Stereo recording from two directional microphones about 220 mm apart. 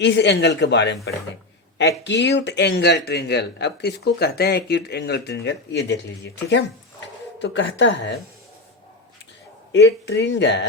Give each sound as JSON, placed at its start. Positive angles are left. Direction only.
{"t": 0.0, "sound": "speech", "side_deg": 50}
{"t": 2.0, "sound": "speech", "side_deg": 55}
{"t": 9.7, "sound": "speech", "side_deg": 50}